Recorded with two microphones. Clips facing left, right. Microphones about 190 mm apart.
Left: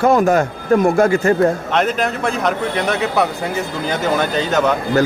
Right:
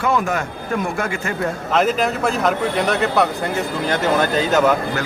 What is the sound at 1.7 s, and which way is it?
A man's voice, centre (ahead or behind).